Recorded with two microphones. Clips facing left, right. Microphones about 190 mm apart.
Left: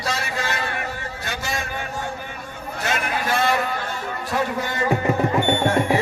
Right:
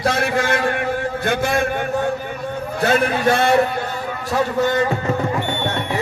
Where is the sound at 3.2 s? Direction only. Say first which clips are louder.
Right 2 dB; 65° right (ahead or behind).